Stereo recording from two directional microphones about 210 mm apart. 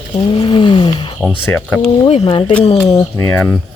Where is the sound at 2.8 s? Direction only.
15° left (ahead or behind).